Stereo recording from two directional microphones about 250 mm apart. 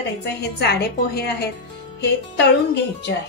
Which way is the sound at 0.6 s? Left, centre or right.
Left.